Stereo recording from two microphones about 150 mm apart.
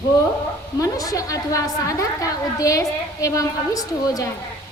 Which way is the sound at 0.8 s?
25° left (ahead or behind).